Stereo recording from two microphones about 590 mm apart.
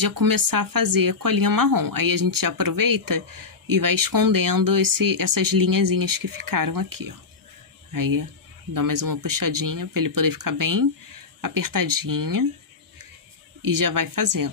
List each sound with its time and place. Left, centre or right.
0.0 s speech: right
13.6 s speech: right